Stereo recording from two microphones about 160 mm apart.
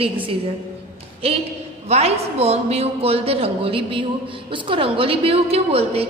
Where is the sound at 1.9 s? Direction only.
40° right (ahead or behind).